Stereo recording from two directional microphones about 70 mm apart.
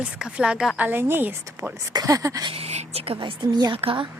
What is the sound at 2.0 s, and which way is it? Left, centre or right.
Speech, right.